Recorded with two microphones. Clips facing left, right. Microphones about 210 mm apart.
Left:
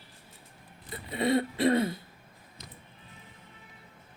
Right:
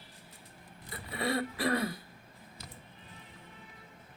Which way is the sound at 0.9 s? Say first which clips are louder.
Left 6 dB; 20° left (ahead or behind).